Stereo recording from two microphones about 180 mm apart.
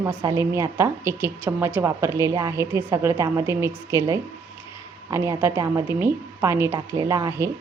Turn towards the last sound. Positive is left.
turn(degrees=-15)  # may be behind; listen again after turning